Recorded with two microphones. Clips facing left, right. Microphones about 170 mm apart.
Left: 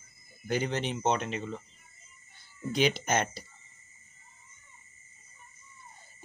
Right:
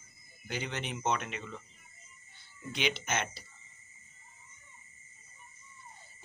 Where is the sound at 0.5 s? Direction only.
40° left (ahead or behind).